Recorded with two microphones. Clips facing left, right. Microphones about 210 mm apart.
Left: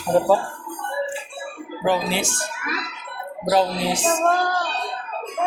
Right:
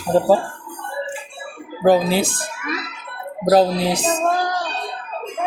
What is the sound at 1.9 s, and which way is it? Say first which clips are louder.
Speech: right 7 dB; 40° right (ahead or behind).